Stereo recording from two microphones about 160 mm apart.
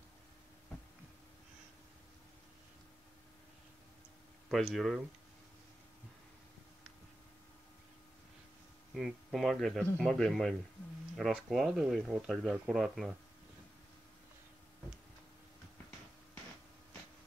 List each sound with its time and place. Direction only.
4.5 s speech: centre (ahead or behind)
8.9 s speech: centre (ahead or behind)